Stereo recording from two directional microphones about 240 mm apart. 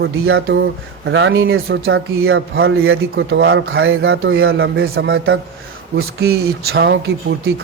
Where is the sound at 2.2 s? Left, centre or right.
Right.